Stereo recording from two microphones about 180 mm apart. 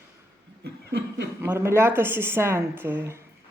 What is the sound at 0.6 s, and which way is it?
Chuckle, 65° right (ahead or behind).